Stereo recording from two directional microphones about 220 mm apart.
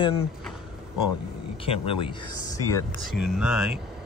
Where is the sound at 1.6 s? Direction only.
25° left (ahead or behind).